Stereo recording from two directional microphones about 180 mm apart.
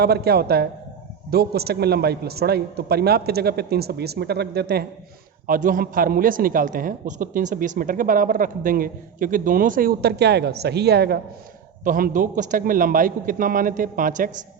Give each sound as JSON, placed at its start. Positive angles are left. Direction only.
{"t": 0.0, "sound": "a man's voice", "side_deg": -60}
{"t": 5.5, "sound": "a man's voice", "side_deg": -50}
{"t": 11.8, "sound": "a man's voice", "side_deg": -50}